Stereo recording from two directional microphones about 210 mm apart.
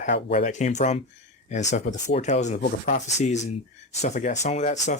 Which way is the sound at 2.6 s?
50° left (ahead or behind).